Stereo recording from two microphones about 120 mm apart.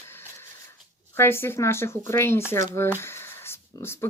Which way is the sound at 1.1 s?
20° left (ahead or behind).